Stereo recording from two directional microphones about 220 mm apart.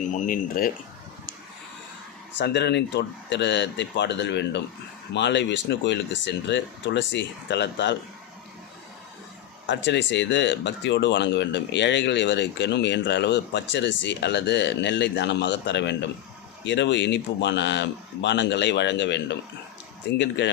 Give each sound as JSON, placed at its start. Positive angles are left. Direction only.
{"t": 0.1, "sound": "speech", "side_deg": 35}
{"t": 2.4, "sound": "speech", "side_deg": 50}
{"t": 9.6, "sound": "speech", "side_deg": 55}